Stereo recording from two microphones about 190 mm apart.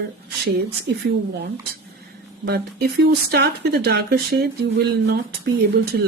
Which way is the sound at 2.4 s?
60° right (ahead or behind).